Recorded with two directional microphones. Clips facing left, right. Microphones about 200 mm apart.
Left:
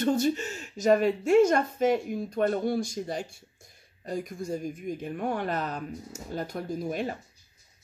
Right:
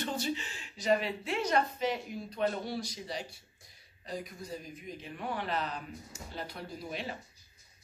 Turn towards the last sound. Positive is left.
turn(degrees=50)  # may be behind; listen again after turning